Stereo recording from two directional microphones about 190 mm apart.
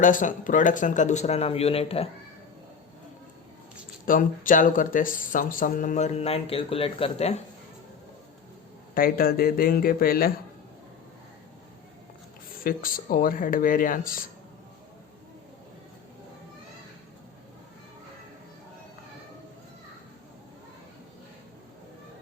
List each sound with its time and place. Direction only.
0.0 s speech: 45° left (ahead or behind)
4.0 s speech: 45° left (ahead or behind)
9.0 s speech: 50° left (ahead or behind)
12.6 s speech: 50° left (ahead or behind)